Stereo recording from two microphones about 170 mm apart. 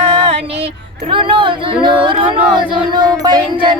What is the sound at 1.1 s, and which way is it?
Speech, 30° right (ahead or behind).